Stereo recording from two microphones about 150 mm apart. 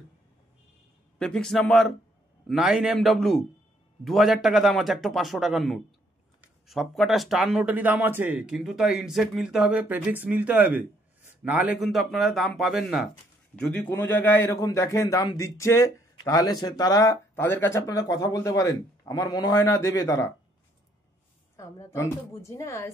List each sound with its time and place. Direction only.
1.1 s speech: 5° left (ahead or behind)
13.6 s a man's voice: 10° left (ahead or behind)
21.5 s a man's voice: 20° left (ahead or behind)